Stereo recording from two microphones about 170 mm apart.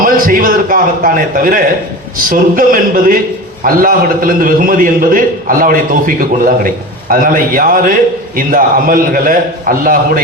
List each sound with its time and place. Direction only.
0.0 s a man's voice: 55° right (ahead or behind)